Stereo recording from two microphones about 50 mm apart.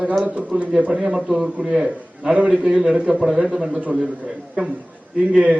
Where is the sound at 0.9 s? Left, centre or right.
Centre.